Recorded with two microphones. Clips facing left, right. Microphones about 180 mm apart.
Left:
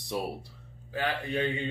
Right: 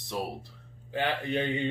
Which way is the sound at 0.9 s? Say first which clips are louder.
Right 1 dB; 20° right (ahead or behind).